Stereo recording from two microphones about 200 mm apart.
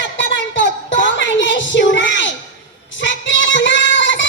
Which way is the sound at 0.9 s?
65° left (ahead or behind).